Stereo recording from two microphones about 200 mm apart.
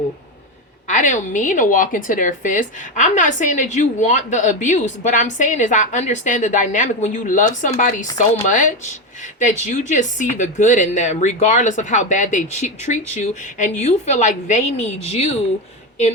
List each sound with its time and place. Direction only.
0.9 s a woman's voice: 35° left (ahead or behind)
9.4 s a woman's voice: 35° left (ahead or behind)